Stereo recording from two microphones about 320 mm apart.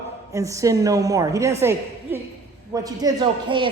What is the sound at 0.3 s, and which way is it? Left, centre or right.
A woman's voice, centre.